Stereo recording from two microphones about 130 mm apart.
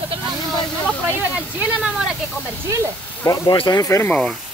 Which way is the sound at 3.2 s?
30° left (ahead or behind).